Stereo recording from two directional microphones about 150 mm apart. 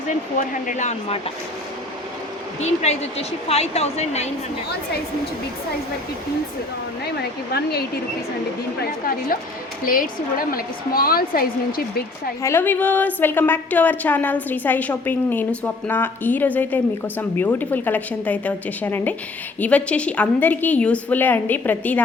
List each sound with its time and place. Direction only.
0.3 s speech: 60° left (ahead or behind)
2.6 s a woman's voice: 45° left (ahead or behind)
7.2 s speech: 90° left
8.8 s a woman's voice: 75° left (ahead or behind)
12.4 s a woman's voice: 15° left (ahead or behind)